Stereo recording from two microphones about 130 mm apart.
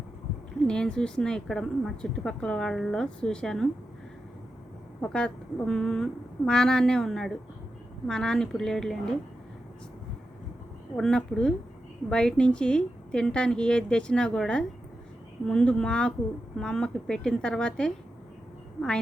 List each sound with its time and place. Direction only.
0.7 s a woman's voice: 5° left (ahead or behind)
4.9 s a woman's voice: 5° left (ahead or behind)
10.9 s a woman's voice: 5° left (ahead or behind)